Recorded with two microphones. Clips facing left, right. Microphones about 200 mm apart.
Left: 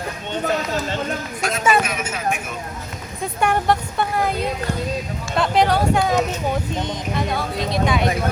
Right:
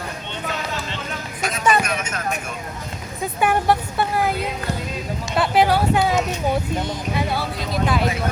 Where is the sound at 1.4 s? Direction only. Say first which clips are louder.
Left 1 dB; centre (ahead or behind).